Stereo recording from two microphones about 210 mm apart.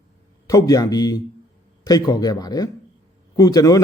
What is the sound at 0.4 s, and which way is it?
A man's voice, 15° left (ahead or behind).